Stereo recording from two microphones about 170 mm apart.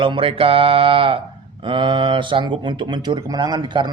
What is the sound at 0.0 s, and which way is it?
Speech, 30° right (ahead or behind).